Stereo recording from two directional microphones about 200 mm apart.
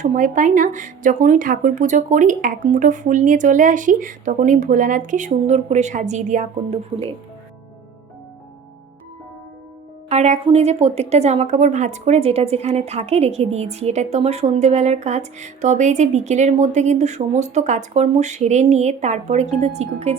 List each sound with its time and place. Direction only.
0.0 s a woman's voice: 40° right (ahead or behind)
10.1 s a woman's voice: 35° right (ahead or behind)